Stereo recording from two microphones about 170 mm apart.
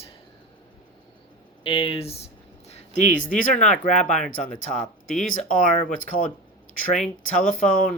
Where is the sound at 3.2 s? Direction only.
45° left (ahead or behind).